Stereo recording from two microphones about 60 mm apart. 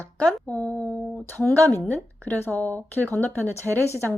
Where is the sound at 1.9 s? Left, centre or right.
Left.